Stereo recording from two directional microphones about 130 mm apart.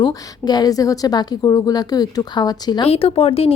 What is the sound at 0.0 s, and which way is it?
A woman's voice, 30° left (ahead or behind).